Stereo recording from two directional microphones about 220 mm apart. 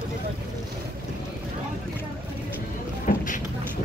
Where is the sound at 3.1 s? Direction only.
35° left (ahead or behind).